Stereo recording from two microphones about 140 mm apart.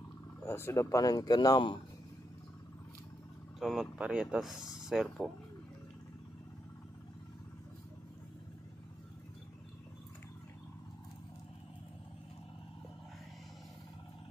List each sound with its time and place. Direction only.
0.5 s speech: 20° left (ahead or behind)
3.5 s speech: centre (ahead or behind)